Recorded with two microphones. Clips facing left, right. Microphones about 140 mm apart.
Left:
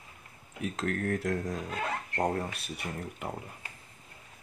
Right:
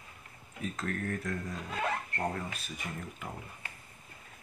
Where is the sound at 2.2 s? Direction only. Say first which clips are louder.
Left 7 dB; 45° left (ahead or behind).